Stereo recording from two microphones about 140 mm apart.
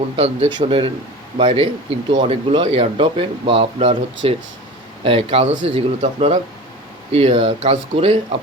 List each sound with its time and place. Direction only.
0.5 s speech: 40° right (ahead or behind)
7.7 s speech: 50° right (ahead or behind)